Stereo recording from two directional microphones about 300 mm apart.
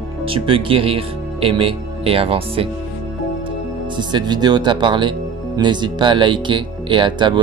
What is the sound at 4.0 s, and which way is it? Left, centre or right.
Speech, centre.